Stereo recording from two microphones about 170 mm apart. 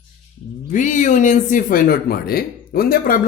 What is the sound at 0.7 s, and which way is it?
Speech, 45° left (ahead or behind).